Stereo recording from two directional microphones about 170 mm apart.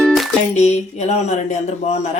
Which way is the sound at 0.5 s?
40° left (ahead or behind).